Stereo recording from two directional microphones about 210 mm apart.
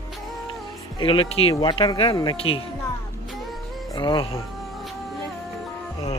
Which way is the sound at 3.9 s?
20° left (ahead or behind).